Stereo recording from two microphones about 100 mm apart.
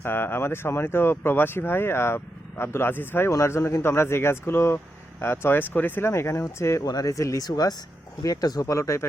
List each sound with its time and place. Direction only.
0.0 s speech: 20° left (ahead or behind)